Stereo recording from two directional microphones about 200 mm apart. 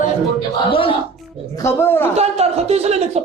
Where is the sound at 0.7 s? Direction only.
25° left (ahead or behind).